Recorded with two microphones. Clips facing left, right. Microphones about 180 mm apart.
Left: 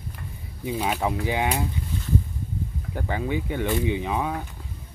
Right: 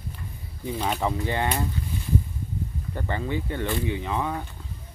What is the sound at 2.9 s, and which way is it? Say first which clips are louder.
Speech: left 2 dB; 10° left (ahead or behind).